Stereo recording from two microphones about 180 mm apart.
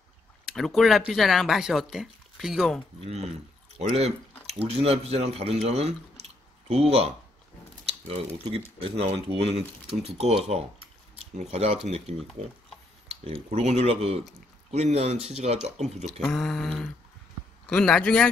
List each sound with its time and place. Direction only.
0.5 s speech: centre (ahead or behind)
3.0 s speech: 35° right (ahead or behind)
4.5 s speech: 35° right (ahead or behind)
11.3 s speech: 35° right (ahead or behind)
16.1 s speech: centre (ahead or behind)